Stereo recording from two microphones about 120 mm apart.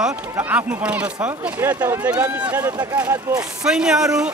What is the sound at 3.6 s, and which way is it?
Speech, 5° right (ahead or behind).